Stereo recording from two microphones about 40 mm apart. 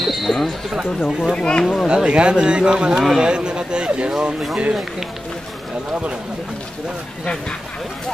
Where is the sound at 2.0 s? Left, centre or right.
Right.